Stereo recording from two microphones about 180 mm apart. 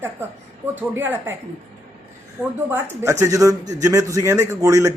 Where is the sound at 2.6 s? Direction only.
15° right (ahead or behind).